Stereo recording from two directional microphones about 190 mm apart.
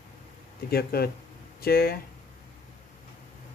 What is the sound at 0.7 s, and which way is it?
Speech, 55° left (ahead or behind).